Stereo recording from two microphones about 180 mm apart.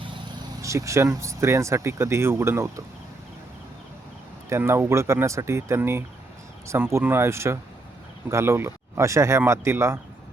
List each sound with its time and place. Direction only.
0.6 s speech: 15° right (ahead or behind)
4.4 s speech: 15° right (ahead or behind)